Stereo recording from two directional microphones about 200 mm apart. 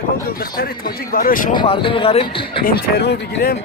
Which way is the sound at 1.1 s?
45° left (ahead or behind).